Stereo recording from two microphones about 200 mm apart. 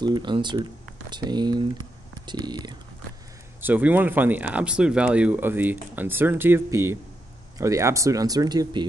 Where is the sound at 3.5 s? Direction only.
10° right (ahead or behind).